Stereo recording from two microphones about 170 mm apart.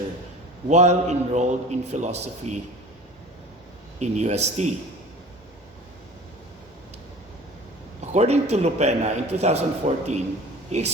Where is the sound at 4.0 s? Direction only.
40° right (ahead or behind).